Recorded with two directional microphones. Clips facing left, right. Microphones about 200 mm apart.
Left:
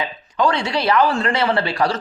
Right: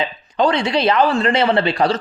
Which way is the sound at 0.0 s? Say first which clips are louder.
Right 2 dB; 25° right (ahead or behind).